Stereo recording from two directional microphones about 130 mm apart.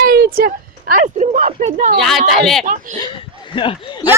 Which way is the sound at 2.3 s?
Centre (ahead or behind).